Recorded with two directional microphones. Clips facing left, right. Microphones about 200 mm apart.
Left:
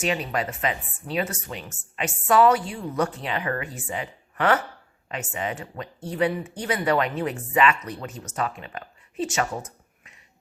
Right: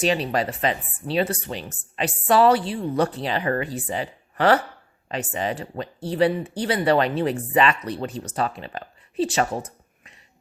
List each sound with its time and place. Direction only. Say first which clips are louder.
0.0 s speech: right 4 dB; 35° right (ahead or behind)